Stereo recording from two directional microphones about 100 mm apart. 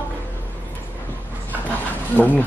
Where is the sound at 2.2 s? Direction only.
20° left (ahead or behind).